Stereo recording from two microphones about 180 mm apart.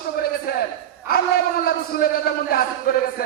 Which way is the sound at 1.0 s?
55° left (ahead or behind).